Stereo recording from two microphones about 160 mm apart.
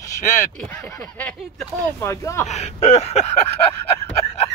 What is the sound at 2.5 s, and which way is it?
Speech, 40° left (ahead or behind).